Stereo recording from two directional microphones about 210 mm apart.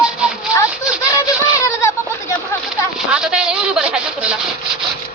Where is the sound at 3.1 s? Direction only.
5° right (ahead or behind).